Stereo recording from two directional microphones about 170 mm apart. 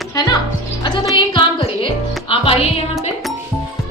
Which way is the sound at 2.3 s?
35° left (ahead or behind).